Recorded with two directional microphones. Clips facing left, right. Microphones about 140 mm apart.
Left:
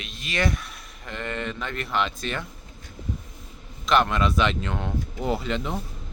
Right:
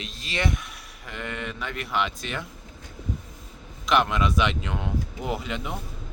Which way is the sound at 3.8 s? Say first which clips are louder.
Left 1 dB; 10° right (ahead or behind).